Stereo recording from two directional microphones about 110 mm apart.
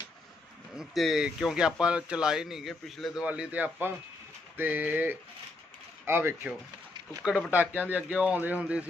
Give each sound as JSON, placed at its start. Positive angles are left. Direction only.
{"t": 0.7, "sound": "speech", "side_deg": 0}
{"t": 3.3, "sound": "speech", "side_deg": -15}
{"t": 7.2, "sound": "speech", "side_deg": 5}
{"t": 7.5, "sound": "speech", "side_deg": -15}